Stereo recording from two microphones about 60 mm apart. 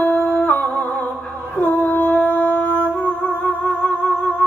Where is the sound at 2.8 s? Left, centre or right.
Left.